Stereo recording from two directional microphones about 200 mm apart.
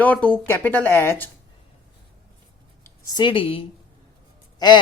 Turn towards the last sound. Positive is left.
turn(degrees=20)  # may be behind; listen again after turning